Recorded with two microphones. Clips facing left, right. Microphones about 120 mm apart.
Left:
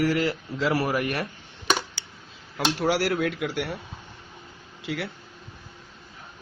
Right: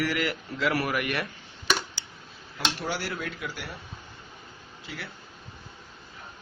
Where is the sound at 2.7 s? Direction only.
85° left; by 3.8 s 70° left (ahead or behind).